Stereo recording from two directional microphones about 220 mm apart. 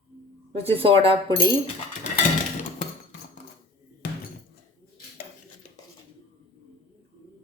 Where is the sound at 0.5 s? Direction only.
25° right (ahead or behind).